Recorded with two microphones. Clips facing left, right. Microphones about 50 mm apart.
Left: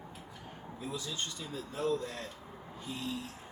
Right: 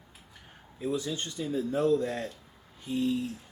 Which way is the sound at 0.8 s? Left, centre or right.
Right.